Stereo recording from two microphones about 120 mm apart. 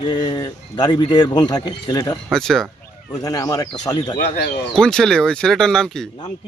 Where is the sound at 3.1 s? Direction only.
30° left (ahead or behind).